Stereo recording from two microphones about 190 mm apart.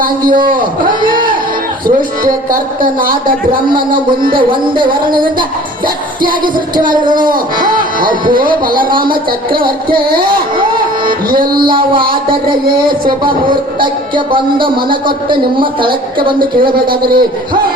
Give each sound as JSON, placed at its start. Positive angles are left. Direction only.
{"t": 0.4, "sound": "a man's voice", "side_deg": -45}
{"t": 2.2, "sound": "speech", "side_deg": -50}
{"t": 4.4, "sound": "speech", "side_deg": -25}
{"t": 6.9, "sound": "speech", "side_deg": -25}
{"t": 7.2, "sound": "speech", "side_deg": -45}
{"t": 10.1, "sound": "speech", "side_deg": -50}
{"t": 11.6, "sound": "speech", "side_deg": -25}
{"t": 15.0, "sound": "speech", "side_deg": -25}
{"t": 16.6, "sound": "speech", "side_deg": -50}